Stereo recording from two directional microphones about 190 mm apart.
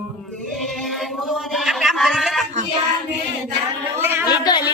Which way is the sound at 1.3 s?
Centre (ahead or behind).